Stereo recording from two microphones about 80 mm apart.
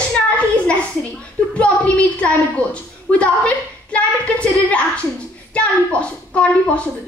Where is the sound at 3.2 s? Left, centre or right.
Centre.